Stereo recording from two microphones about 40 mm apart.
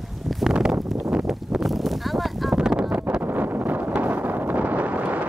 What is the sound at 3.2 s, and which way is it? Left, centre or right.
Wind noise, right.